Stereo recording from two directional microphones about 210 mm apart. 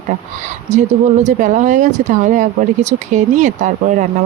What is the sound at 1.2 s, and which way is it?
Speech, 35° right (ahead or behind).